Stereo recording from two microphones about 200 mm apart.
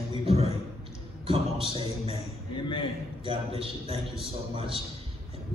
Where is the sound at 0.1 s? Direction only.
30° right (ahead or behind).